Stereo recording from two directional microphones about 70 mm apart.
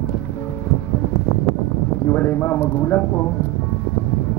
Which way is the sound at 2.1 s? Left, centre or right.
Left.